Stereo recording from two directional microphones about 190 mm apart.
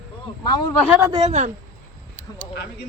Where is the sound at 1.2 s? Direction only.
35° right (ahead or behind).